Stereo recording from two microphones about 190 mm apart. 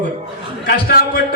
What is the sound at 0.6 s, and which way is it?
Speech, 55° left (ahead or behind).